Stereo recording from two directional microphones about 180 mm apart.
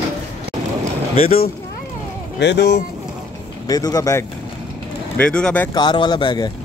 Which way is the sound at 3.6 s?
20° left (ahead or behind).